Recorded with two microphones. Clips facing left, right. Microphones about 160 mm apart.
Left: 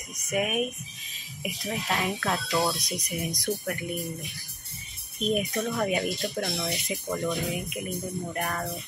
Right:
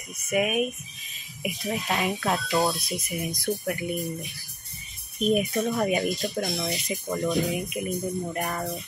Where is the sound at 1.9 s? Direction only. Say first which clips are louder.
Right 1 dB; centre (ahead or behind).